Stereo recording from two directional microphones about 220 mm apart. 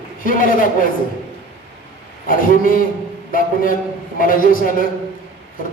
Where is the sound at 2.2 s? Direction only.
40° left (ahead or behind).